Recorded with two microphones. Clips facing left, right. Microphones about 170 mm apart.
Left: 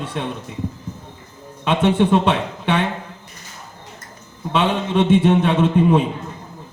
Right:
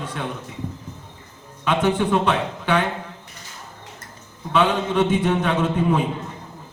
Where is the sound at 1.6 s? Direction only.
30° left (ahead or behind).